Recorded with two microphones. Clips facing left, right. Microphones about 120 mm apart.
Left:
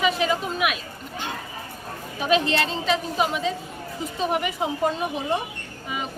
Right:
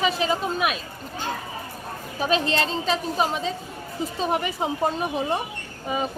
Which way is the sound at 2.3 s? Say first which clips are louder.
Left 2 dB; 35° right (ahead or behind).